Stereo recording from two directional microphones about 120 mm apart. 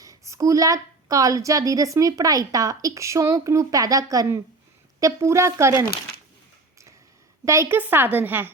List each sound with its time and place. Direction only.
0.0 s a woman's voice: 30° right (ahead or behind)
7.4 s a woman's voice: 25° right (ahead or behind)